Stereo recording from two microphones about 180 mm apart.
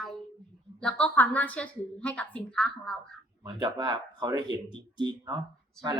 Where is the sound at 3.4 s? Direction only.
25° right (ahead or behind).